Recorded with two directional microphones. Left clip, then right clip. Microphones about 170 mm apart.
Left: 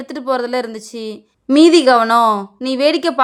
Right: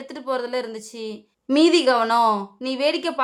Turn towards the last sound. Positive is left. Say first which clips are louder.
# left 8 dB
turn(degrees=35)  # may be behind; listen again after turning